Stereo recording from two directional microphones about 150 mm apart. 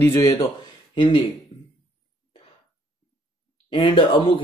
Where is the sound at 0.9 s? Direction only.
35° left (ahead or behind).